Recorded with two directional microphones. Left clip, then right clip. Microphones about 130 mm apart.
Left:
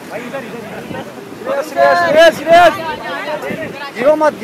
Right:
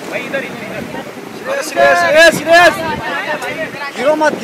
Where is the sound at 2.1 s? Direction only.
35° right (ahead or behind).